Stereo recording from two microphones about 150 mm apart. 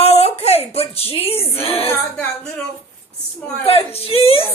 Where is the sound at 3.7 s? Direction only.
40° left (ahead or behind).